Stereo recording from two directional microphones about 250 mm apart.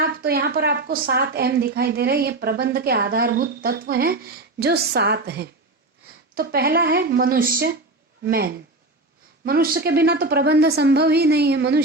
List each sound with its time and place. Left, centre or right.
0.0 s a woman's voice: right